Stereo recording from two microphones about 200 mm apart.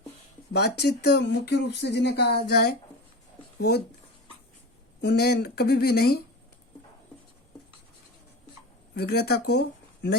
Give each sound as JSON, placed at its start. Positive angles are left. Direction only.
{"t": 0.5, "sound": "speech", "side_deg": 55}
{"t": 4.9, "sound": "speech", "side_deg": 55}
{"t": 9.0, "sound": "speech", "side_deg": 50}